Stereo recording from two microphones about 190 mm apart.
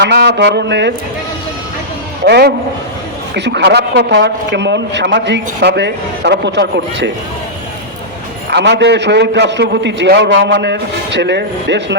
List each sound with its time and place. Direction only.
0.0 s a man's voice: 60° right (ahead or behind)
2.2 s a man's voice: 60° right (ahead or behind)
8.4 s a man's voice: 65° right (ahead or behind)